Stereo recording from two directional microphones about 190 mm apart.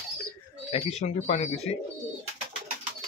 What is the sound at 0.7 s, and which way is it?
Speech, 35° left (ahead or behind).